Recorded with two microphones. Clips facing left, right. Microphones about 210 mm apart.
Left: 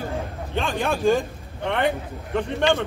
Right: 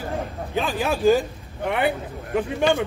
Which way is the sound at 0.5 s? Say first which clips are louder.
Right 1 dB; 5° right (ahead or behind).